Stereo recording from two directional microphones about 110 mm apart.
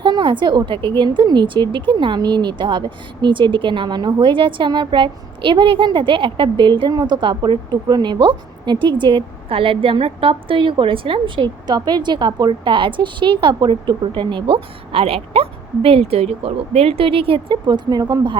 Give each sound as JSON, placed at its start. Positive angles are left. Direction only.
{"t": 0.0, "sound": "a woman's voice", "side_deg": -45}